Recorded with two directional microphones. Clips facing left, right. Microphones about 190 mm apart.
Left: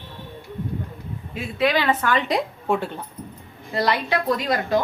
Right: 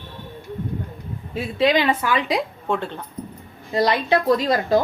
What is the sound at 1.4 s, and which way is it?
A woman's voice, 25° right (ahead or behind).